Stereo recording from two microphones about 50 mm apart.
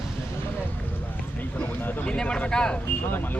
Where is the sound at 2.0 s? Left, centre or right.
Left.